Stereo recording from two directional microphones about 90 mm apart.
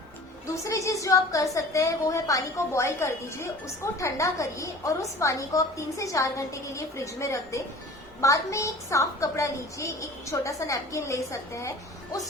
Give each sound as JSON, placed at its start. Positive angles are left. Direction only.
{"t": 0.4, "sound": "a woman's voice", "side_deg": 35}